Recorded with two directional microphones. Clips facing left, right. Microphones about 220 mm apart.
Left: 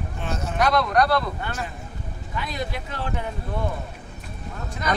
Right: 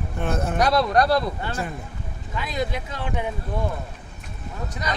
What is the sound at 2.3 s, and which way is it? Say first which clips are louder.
Speech: right 3 dB; 20° right (ahead or behind).